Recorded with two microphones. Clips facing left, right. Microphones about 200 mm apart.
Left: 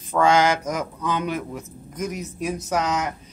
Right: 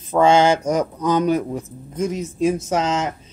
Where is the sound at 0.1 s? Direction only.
25° right (ahead or behind).